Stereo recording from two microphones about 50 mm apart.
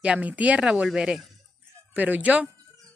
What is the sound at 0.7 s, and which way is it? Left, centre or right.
Speech, centre.